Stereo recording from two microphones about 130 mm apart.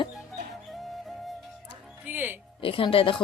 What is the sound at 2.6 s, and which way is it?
Speech, 45° left (ahead or behind).